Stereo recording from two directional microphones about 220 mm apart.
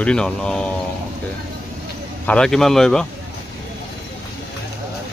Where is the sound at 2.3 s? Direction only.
5° left (ahead or behind).